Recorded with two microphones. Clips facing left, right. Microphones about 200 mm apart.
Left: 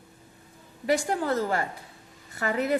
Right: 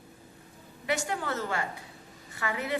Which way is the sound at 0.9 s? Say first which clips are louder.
Left 6 dB; 35° left (ahead or behind).